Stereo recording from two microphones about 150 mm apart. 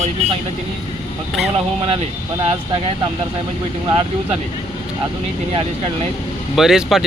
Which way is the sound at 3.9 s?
35° right (ahead or behind).